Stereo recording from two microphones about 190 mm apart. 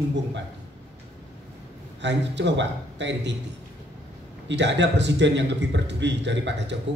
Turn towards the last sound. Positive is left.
turn(degrees=-65)  # may be behind; listen again after turning